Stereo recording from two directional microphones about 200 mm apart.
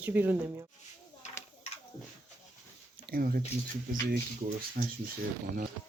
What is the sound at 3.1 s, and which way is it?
Speech, 45° right (ahead or behind).